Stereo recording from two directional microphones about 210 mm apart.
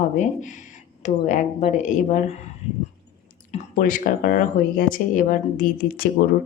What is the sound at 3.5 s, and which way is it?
Speech, 40° left (ahead or behind).